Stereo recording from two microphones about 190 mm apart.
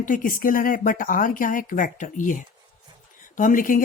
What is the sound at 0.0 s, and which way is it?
A woman's voice, 45° left (ahead or behind).